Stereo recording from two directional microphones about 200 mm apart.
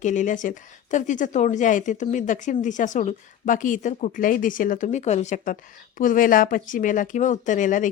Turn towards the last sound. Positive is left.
turn(degrees=40)  # may be behind; listen again after turning